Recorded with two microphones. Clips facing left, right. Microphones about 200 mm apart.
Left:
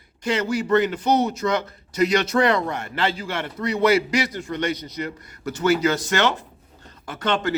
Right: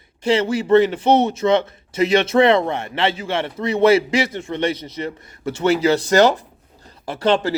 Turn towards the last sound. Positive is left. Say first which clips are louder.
# right 5 dB
turn(degrees=-30)  # may be behind; listen again after turning